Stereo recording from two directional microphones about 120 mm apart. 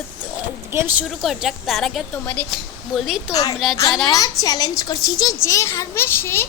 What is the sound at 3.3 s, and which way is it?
A child's voice, 30° left (ahead or behind).